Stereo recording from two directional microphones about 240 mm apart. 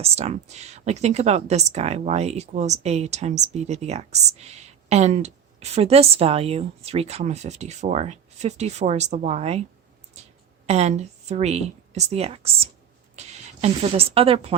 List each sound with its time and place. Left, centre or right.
0.0 s speech: right
10.2 s a sound: right
10.7 s speech: right